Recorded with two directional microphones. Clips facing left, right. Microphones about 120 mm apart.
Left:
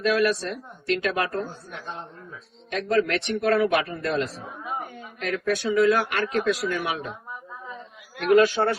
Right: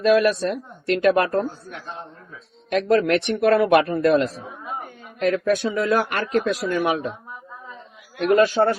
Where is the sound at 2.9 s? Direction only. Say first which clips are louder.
Right 4 dB; 55° right (ahead or behind).